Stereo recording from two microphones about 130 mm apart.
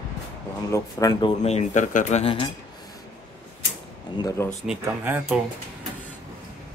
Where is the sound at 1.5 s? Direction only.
65° left (ahead or behind).